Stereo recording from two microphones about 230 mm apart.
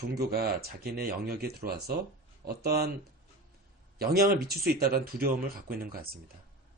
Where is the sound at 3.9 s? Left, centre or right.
Right.